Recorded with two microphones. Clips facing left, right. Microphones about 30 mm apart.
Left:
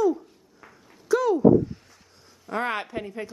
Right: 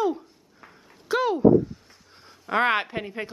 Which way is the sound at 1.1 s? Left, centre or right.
Right.